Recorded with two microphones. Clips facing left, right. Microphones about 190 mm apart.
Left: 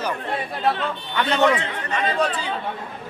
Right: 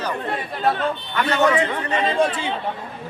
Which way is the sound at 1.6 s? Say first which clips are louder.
Right 5 dB; 20° right (ahead or behind).